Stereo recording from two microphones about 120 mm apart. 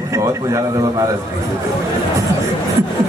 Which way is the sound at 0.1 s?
25° right (ahead or behind).